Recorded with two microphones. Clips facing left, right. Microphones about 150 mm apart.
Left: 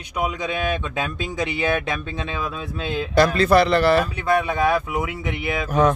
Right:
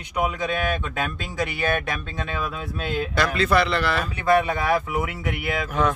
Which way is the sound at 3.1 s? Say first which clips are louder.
Left 6 dB; 40° left (ahead or behind).